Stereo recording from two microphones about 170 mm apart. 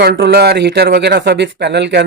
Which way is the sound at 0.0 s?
70° right (ahead or behind).